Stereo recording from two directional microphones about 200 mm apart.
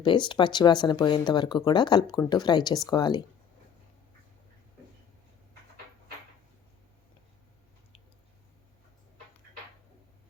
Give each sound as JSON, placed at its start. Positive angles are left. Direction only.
{"t": 0.0, "sound": "speech", "side_deg": 25}